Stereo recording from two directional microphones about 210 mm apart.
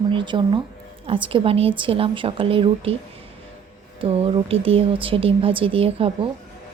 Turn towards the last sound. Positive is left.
turn(degrees=-25)  # may be behind; listen again after turning